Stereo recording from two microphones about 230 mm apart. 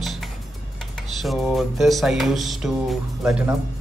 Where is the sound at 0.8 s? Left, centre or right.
Centre.